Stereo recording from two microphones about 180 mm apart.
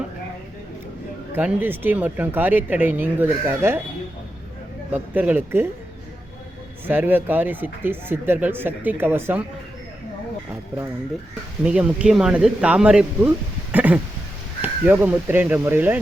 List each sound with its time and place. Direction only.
1.4 s speech: 10° right (ahead or behind)
4.9 s speech: 10° right (ahead or behind)
6.8 s speech: 10° right (ahead or behind)
11.6 s speech: 5° right (ahead or behind)